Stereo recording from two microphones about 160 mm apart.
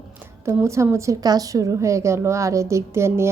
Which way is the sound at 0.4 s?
20° right (ahead or behind).